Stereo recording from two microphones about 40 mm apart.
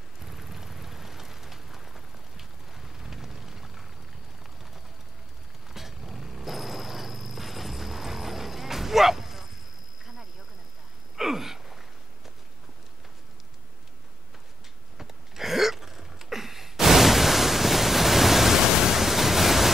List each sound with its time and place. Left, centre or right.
0.2 s vehicle: centre
5.7 s music: centre
11.1 s gasp: centre
15.0 s a sound: centre